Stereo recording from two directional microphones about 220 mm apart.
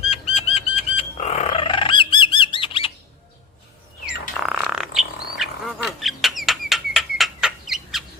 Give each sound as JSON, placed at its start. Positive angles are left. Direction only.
{"t": 0.1, "sound": "bird flight", "side_deg": 25}
{"t": 4.0, "sound": "bird", "side_deg": -5}